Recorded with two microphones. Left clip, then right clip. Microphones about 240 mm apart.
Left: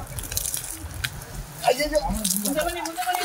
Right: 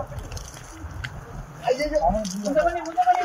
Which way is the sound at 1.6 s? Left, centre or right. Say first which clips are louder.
Even; centre.